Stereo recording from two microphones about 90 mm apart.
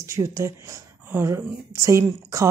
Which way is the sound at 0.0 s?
35° right (ahead or behind).